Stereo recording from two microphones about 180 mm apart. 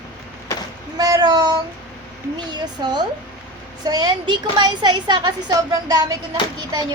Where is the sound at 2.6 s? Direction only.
25° right (ahead or behind).